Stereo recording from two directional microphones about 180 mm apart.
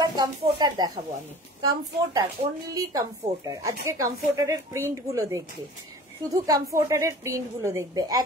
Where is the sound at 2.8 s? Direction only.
20° right (ahead or behind).